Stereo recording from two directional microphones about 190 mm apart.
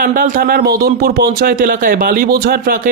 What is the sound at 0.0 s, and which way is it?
Speech, 45° right (ahead or behind).